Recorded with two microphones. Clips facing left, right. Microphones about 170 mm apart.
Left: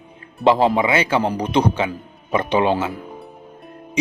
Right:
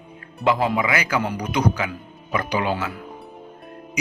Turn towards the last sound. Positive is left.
turn(degrees=30)  # may be behind; listen again after turning